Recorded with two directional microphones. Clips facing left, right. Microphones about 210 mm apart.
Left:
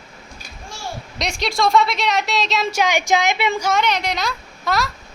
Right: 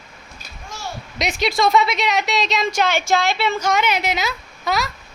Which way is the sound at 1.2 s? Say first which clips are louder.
Right 2 dB; centre (ahead or behind).